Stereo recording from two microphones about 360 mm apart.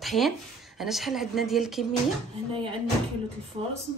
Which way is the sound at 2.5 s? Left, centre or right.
Centre.